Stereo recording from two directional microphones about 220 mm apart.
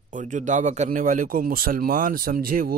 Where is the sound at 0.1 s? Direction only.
35° right (ahead or behind).